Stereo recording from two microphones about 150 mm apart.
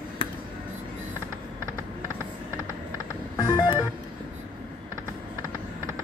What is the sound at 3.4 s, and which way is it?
Music, 30° left (ahead or behind).